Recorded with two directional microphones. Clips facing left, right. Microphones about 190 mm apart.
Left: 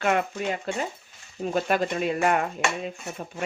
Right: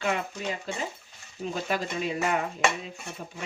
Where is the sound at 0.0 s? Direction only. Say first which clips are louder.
Left 5 dB; 60° left (ahead or behind).